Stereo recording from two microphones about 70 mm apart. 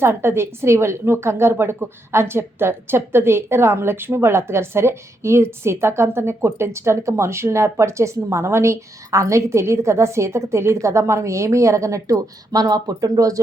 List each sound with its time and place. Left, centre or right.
0.0 s a woman's voice: right